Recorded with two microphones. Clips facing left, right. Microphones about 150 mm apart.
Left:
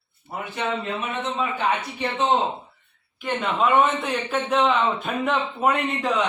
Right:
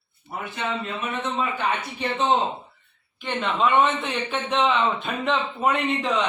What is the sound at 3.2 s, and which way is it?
A man's voice, 5° left (ahead or behind).